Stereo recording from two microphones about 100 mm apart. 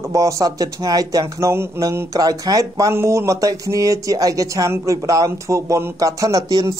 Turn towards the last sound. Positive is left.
turn(degrees=-35)  # may be behind; listen again after turning